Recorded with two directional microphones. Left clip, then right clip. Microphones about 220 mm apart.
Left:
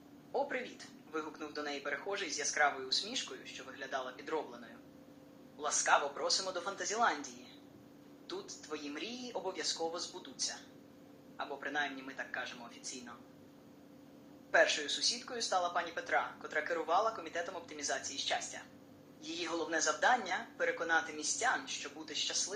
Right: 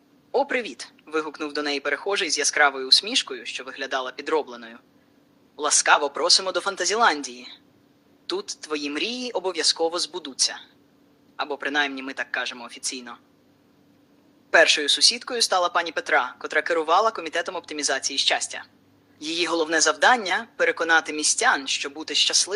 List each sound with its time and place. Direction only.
0.3 s speech: 45° right (ahead or behind)
8.3 s speech: 45° right (ahead or behind)
14.5 s speech: 45° right (ahead or behind)